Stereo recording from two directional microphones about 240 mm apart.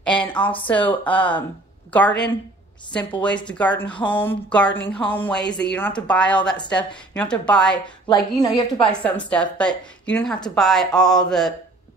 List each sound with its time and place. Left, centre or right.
0.0 s a sound: centre
0.7 s a woman's voice: centre
3.4 s a woman's voice: centre
8.1 s a woman's voice: centre
9.0 s a woman's voice: centre